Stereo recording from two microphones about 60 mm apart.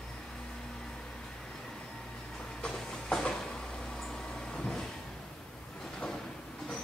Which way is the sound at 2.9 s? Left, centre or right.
Centre.